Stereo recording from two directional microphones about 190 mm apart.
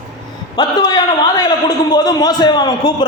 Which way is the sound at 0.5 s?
20° left (ahead or behind).